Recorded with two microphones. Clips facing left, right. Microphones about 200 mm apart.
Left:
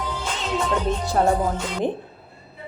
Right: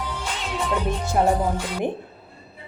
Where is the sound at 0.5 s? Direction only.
10° right (ahead or behind).